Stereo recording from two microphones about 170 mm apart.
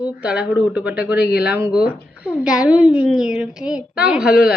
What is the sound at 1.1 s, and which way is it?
Speech, 70° left (ahead or behind).